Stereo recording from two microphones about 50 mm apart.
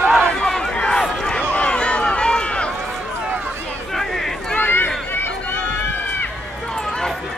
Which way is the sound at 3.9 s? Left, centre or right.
Centre.